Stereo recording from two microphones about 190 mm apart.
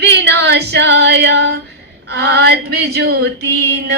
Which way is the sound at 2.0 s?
60° right (ahead or behind).